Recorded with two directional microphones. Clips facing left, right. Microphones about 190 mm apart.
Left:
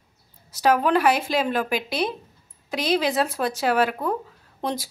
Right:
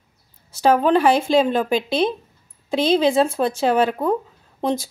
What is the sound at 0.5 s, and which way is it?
Speech, 25° right (ahead or behind).